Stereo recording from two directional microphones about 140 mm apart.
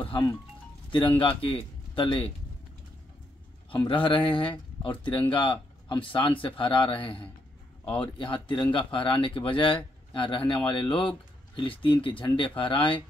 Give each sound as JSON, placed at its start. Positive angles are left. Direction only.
{"t": 1.2, "sound": "speech", "side_deg": 40}
{"t": 3.7, "sound": "speech", "side_deg": 35}